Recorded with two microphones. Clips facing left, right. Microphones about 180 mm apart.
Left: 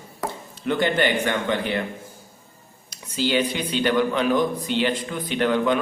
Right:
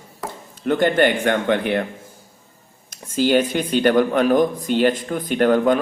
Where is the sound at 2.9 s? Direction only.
50° right (ahead or behind).